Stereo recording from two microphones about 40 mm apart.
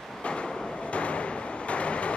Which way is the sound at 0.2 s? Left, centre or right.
Left.